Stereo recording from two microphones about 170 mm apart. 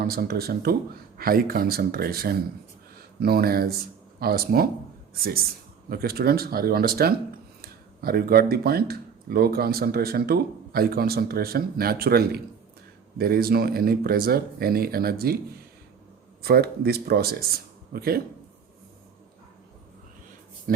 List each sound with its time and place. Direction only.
0.0 s speech: 65° right (ahead or behind)
16.4 s speech: 65° right (ahead or behind)
20.7 s speech: 55° right (ahead or behind)